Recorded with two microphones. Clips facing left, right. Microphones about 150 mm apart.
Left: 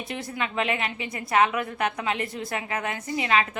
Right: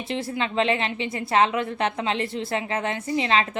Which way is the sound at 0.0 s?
25° right (ahead or behind).